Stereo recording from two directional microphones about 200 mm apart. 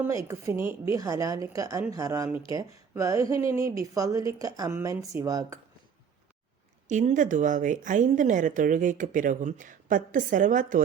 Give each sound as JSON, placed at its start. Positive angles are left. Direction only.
{"t": 0.0, "sound": "a woman's voice", "side_deg": -15}
{"t": 6.8, "sound": "speech", "side_deg": -35}